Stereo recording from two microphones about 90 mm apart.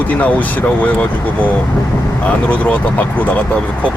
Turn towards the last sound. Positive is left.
turn(degrees=15)  # may be behind; listen again after turning